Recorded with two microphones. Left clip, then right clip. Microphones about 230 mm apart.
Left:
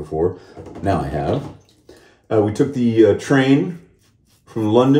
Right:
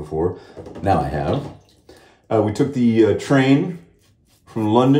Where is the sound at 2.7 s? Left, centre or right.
Centre.